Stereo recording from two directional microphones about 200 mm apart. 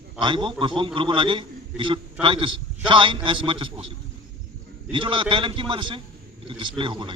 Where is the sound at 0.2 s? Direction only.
25° right (ahead or behind).